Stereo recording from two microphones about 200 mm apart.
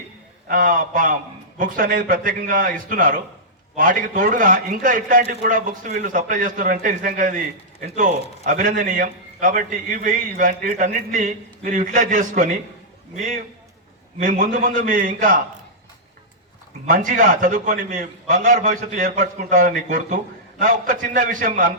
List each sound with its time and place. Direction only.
0.4 s a man's voice: 45° right (ahead or behind)
16.9 s a man's voice: 40° right (ahead or behind)